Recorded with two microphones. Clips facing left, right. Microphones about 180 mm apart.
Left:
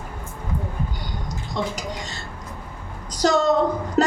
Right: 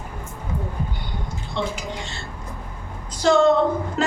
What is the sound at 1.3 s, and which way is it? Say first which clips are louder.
A woman's voice: even; 40° left (ahead or behind).